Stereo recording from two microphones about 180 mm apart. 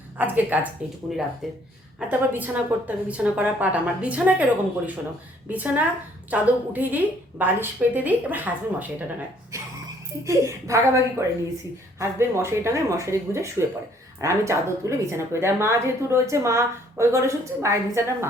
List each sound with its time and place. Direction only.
0.2 s speech: 10° right (ahead or behind)
1.1 s speech: centre (ahead or behind)
5.5 s speech: 10° right (ahead or behind)
10.2 s speech: 15° right (ahead or behind)